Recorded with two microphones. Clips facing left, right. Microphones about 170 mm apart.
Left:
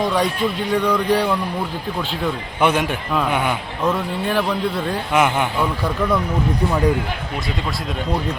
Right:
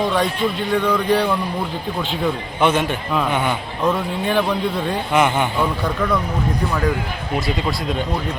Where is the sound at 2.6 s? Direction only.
10° left (ahead or behind).